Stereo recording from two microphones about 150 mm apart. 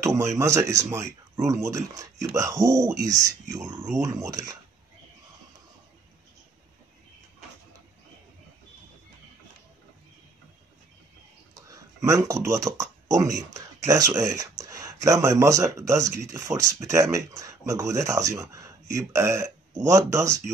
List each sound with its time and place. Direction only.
0.0 s speech: 20° right (ahead or behind)
11.7 s a sound: 20° right (ahead or behind)
12.4 s speech: 20° right (ahead or behind)